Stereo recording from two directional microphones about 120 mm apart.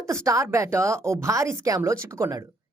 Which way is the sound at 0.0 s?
25° right (ahead or behind).